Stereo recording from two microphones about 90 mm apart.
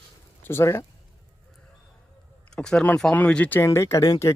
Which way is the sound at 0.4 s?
30° left (ahead or behind).